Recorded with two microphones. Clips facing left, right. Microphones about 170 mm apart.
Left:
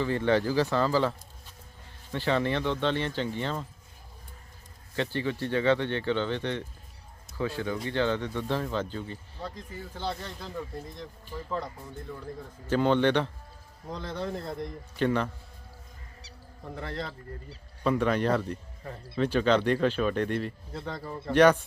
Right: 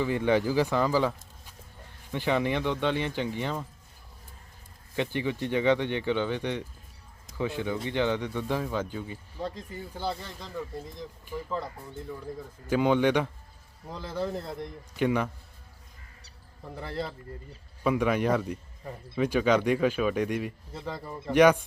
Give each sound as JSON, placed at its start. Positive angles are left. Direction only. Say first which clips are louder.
{"t": 0.0, "sound": "a man's voice", "louder": "even", "side_deg": -15}
{"t": 2.1, "sound": "a man's voice", "louder": "even", "side_deg": -15}
{"t": 4.9, "sound": "a man's voice", "louder": "right 1 dB", "side_deg": -15}
{"t": 12.6, "sound": "a man's voice", "louder": "even", "side_deg": -10}
{"t": 16.7, "sound": "a man's voice", "louder": "right 2 dB", "side_deg": -5}